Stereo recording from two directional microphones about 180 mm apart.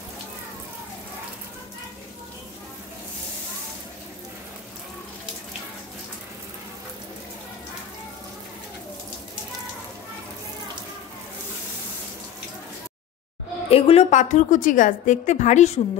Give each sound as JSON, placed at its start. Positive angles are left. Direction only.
{"t": 13.7, "sound": "a woman's voice", "side_deg": 35}